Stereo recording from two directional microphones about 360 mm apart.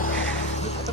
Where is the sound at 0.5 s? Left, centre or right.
Centre.